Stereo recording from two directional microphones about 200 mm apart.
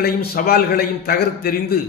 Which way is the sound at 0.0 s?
50° left (ahead or behind).